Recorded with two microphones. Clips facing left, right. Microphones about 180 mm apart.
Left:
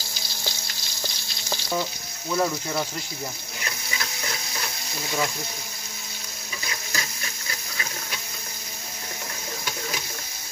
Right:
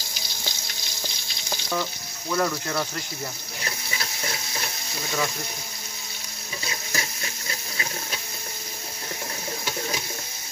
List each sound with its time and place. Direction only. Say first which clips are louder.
2.3 s speech: even; 10° left (ahead or behind)
3.6 s frying: even; 30° right (ahead or behind)
6.7 s water: right 1 dB; 25° right (ahead or behind)